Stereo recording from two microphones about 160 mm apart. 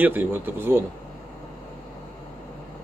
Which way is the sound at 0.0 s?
10° right (ahead or behind).